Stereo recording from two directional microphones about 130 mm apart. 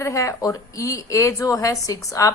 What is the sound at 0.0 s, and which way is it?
A woman's voice, 25° left (ahead or behind).